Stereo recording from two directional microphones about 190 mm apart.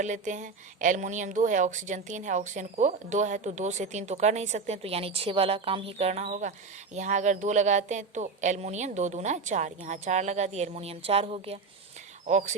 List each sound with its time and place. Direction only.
0.0 s speech: 40° right (ahead or behind)